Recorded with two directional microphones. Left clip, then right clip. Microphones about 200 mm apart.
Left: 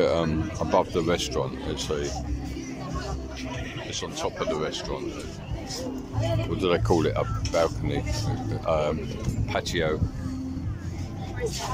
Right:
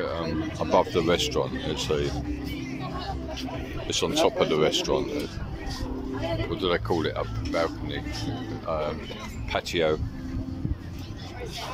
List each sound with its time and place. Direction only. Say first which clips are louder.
0.0 s a sound: left 7 dB; 15° left (ahead or behind)
0.6 s speech: right 1 dB; centre (ahead or behind)
3.9 s speech: right 9 dB; 15° right (ahead or behind)
6.6 s speech: left 3 dB; 10° left (ahead or behind)
9.5 s speech: right 2 dB; centre (ahead or behind)